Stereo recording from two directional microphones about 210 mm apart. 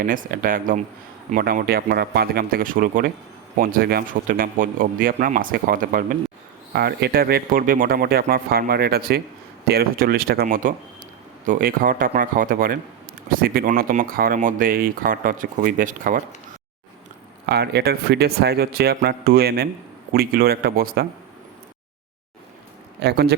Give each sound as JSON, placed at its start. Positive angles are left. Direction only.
{"t": 0.0, "sound": "a man's voice", "side_deg": -40}
{"t": 17.4, "sound": "speech", "side_deg": -50}
{"t": 23.0, "sound": "speech", "side_deg": -50}